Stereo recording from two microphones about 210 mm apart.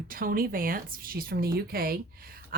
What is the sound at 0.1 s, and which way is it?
Speech, 45° right (ahead or behind).